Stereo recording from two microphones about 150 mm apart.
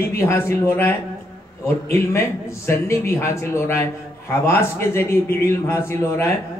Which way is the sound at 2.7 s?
15° left (ahead or behind).